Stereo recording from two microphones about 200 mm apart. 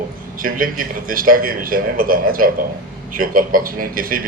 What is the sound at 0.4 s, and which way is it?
A man's voice, 45° right (ahead or behind).